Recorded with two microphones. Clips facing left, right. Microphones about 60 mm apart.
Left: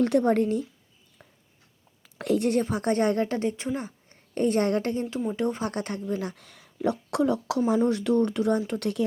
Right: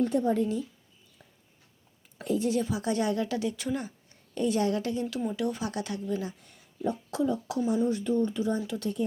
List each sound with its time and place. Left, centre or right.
0.0 s speech: left
2.1 s a woman's voice: left
6.3 s speech: left